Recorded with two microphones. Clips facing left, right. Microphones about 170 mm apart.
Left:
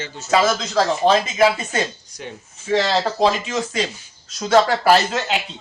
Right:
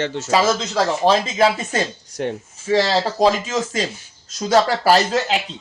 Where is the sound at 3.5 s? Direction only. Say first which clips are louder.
Right 1 dB; 45° right (ahead or behind).